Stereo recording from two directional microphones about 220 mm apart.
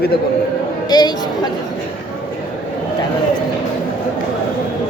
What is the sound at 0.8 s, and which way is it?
Speech, 20° left (ahead or behind).